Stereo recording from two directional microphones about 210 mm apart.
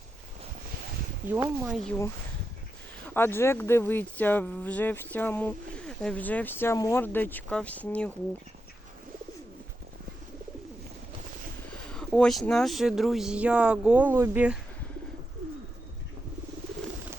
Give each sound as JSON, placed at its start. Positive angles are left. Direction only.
{"t": 1.3, "sound": "speech", "side_deg": -5}
{"t": 3.2, "sound": "speech", "side_deg": 10}
{"t": 11.7, "sound": "speech", "side_deg": 5}